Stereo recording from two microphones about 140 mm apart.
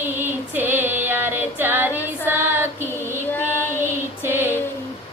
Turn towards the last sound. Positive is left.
turn(degrees=-15)  # may be behind; listen again after turning